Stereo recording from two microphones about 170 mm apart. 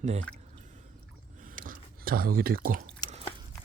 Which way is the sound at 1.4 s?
50° right (ahead or behind).